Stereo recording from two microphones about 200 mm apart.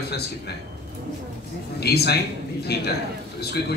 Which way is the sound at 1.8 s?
55° left (ahead or behind).